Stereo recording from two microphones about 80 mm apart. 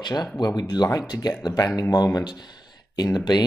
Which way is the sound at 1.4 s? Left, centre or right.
Left.